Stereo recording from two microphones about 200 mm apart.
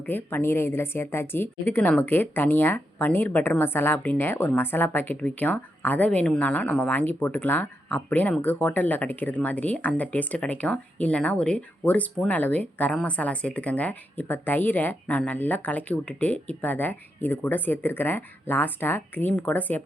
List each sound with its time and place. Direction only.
0.0 s a woman's voice: 10° left (ahead or behind)